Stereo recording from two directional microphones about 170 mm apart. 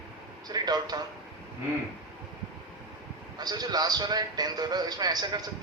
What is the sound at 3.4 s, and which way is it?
A man's voice, 25° right (ahead or behind).